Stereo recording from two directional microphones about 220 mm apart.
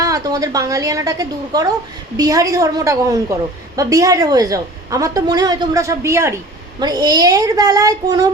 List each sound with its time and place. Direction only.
0.0 s a woman's voice: 15° right (ahead or behind)